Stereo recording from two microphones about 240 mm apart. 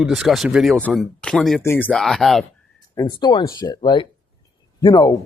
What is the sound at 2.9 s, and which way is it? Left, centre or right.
Speech, centre.